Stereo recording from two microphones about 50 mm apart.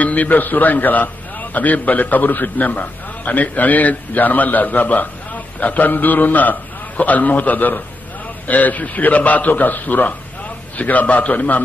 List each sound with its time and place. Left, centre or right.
0.0 s a man's voice: left